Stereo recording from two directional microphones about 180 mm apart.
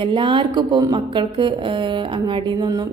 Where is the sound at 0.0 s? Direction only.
25° right (ahead or behind).